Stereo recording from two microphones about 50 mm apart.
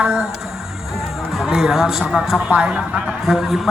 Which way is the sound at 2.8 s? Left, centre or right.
Centre.